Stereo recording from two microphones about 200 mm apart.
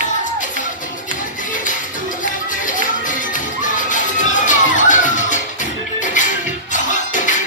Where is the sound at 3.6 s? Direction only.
40° left (ahead or behind).